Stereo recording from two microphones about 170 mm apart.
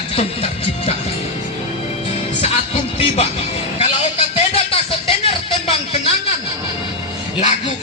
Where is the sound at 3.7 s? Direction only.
40° left (ahead or behind).